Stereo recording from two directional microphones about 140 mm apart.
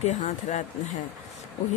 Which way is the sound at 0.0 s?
55° left (ahead or behind).